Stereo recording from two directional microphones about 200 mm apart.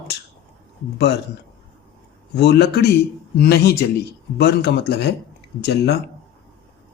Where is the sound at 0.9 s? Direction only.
55° left (ahead or behind).